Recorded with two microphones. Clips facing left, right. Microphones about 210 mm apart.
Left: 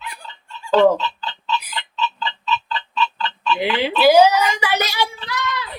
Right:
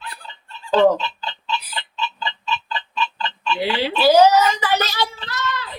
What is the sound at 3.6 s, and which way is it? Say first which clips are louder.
Speech: left 2 dB; 15° left (ahead or behind).